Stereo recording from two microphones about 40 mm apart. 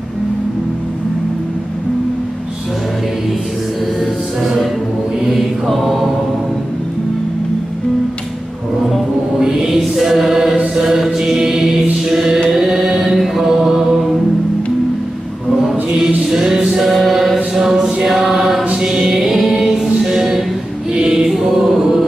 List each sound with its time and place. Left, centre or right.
4.0 s music: centre
5.3 s mantra: centre
9.4 s music: centre
10.7 s chant: centre
12.5 s mantra: centre
16.3 s music: centre
17.6 s chant: centre
18.0 s choir: centre
18.6 s chant: right
18.9 s music: centre
21.1 s choir: centre